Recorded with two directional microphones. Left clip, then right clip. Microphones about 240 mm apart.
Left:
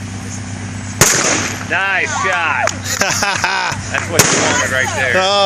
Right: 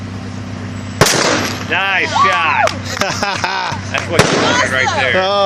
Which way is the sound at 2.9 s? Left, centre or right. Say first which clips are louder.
Left 1 dB; centre.